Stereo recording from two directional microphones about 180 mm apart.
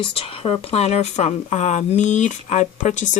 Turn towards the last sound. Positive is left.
turn(degrees=40)  # may be behind; listen again after turning